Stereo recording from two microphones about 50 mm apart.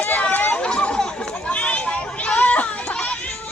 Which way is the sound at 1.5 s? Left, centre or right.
Left.